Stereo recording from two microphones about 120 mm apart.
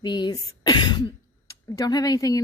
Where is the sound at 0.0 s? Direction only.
35° left (ahead or behind).